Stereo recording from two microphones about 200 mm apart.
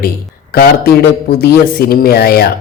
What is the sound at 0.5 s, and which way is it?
Speech, 50° left (ahead or behind).